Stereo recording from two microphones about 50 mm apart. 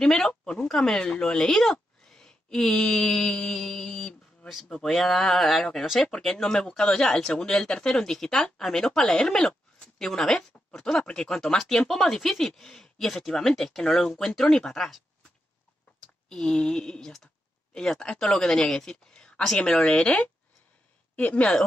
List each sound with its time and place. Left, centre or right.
0.0 s speech: centre
16.3 s speech: centre
21.2 s speech: left